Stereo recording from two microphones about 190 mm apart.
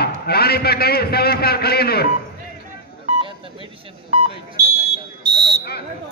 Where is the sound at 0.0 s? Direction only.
55° left (ahead or behind).